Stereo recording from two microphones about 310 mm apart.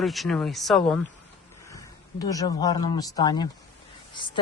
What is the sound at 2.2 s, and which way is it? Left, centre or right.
Speech, centre.